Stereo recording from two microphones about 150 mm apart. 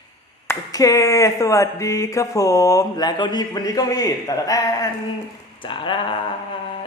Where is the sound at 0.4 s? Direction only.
20° left (ahead or behind).